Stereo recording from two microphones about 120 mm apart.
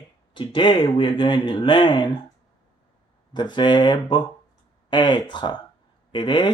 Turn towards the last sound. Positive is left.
turn(degrees=40)  # may be behind; listen again after turning